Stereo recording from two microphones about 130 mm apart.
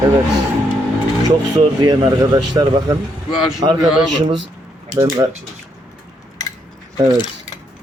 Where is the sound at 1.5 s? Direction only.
30° right (ahead or behind).